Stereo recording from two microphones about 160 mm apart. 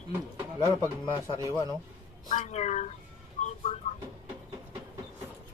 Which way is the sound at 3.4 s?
50° left (ahead or behind).